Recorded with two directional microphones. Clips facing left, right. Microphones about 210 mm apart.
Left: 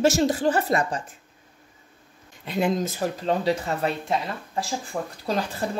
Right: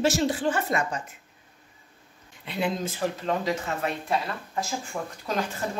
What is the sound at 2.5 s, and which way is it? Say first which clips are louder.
Speech: left 4 dB; 45° left (ahead or behind).